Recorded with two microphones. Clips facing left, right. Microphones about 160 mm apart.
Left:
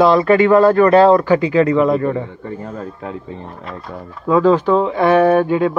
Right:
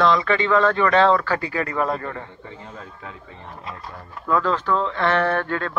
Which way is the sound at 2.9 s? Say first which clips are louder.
Left 11 dB; 30° left (ahead or behind).